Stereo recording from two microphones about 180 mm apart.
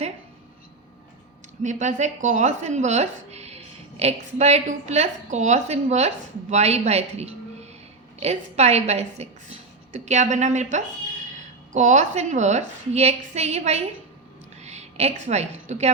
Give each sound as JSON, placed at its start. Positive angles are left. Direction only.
{"t": 1.6, "sound": "a woman's voice", "side_deg": -40}